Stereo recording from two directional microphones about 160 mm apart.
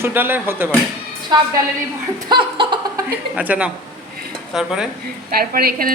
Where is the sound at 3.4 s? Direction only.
10° right (ahead or behind).